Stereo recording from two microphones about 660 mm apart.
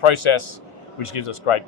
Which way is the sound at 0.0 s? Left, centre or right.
Left.